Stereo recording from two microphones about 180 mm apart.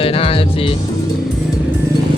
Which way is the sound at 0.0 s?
30° left (ahead or behind).